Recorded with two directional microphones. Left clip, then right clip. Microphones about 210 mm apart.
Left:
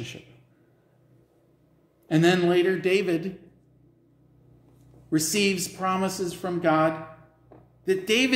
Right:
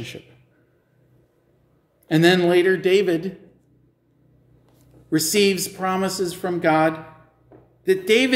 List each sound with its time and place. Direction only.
2.0 s speech: 25° right (ahead or behind)
5.1 s speech: 20° right (ahead or behind)